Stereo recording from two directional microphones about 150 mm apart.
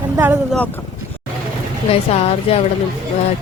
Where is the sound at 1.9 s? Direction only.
40° left (ahead or behind).